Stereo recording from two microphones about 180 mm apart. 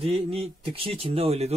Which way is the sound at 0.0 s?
30° right (ahead or behind).